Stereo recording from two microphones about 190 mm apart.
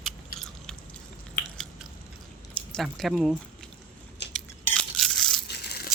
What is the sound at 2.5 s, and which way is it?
Speech, 5° left (ahead or behind).